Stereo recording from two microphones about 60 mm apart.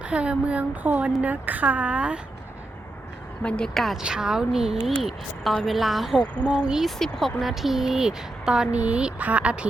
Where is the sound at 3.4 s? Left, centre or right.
Centre.